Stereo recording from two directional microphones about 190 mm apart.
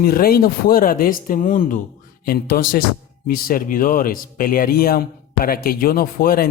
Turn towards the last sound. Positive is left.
turn(degrees=50)  # may be behind; listen again after turning